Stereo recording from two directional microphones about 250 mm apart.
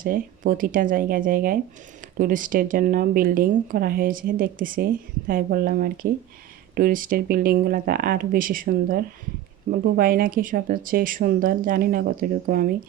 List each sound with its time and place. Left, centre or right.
0.0 s speech: right